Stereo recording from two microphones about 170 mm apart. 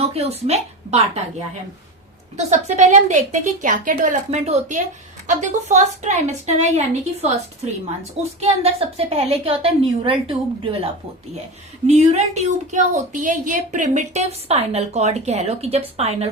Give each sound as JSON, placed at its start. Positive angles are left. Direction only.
{"t": 0.1, "sound": "a woman's voice", "side_deg": -35}
{"t": 2.3, "sound": "a woman's voice", "side_deg": -40}
{"t": 11.9, "sound": "a woman's voice", "side_deg": -40}